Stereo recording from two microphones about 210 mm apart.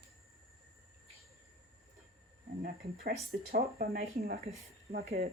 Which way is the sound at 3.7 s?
45° right (ahead or behind).